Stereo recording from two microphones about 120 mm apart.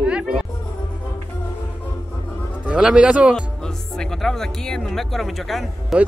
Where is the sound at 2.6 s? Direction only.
10° right (ahead or behind).